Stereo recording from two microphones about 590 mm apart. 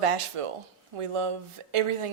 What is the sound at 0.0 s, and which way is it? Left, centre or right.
A woman's voice, right.